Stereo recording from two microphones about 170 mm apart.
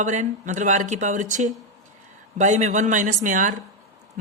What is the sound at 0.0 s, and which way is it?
Speech, 45° right (ahead or behind).